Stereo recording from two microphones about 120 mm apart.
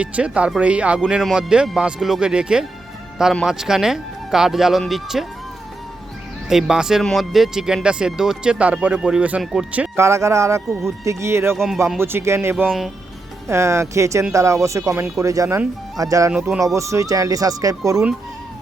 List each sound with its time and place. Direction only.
0.0 s speech: 10° right (ahead or behind)
6.5 s speech: 5° right (ahead or behind)
9.9 s speech: 25° right (ahead or behind)
11.5 s speech: centre (ahead or behind)
11.9 s speech: 20° right (ahead or behind)